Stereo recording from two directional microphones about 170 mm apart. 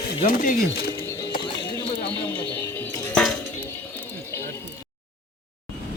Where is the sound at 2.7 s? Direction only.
5° left (ahead or behind).